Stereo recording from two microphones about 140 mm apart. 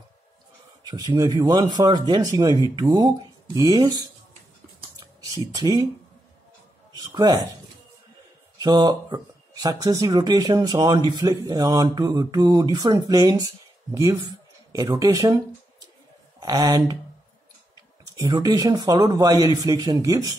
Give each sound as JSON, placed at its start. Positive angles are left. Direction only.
{"t": 0.8, "sound": "speech", "side_deg": -30}
{"t": 5.0, "sound": "a sound", "side_deg": -25}
{"t": 7.0, "sound": "speech", "side_deg": -30}
{"t": 8.6, "sound": "speech", "side_deg": -30}
{"t": 18.1, "sound": "speech", "side_deg": -30}